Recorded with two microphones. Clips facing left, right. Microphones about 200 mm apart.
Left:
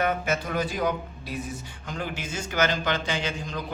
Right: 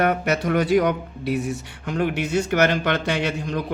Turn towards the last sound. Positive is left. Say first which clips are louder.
# right 6 dB
turn(degrees=-65)  # may be behind; listen again after turning